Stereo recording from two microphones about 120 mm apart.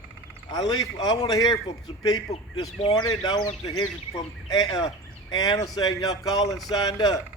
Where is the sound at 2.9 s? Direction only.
30° left (ahead or behind).